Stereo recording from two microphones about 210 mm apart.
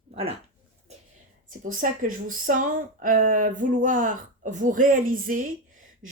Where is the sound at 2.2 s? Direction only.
40° right (ahead or behind).